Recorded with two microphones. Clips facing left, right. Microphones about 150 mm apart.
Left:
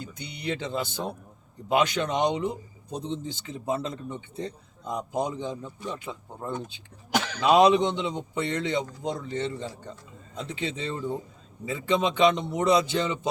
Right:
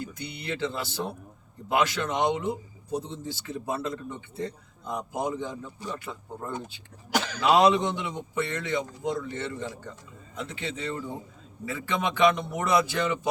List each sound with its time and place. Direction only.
0.0 s speech: 20° left (ahead or behind)